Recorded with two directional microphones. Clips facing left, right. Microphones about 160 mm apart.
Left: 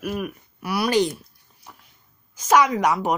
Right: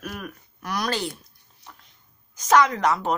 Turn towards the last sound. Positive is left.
turn(degrees=10)  # may be behind; listen again after turning